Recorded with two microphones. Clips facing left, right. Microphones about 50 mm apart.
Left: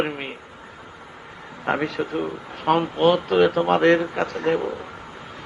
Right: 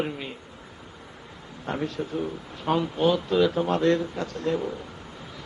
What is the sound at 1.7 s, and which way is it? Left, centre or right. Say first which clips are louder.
Speech: left 6 dB; left.